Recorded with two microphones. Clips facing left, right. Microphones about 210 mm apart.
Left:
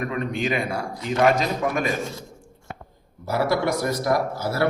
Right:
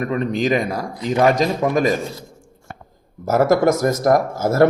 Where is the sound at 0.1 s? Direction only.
35° right (ahead or behind).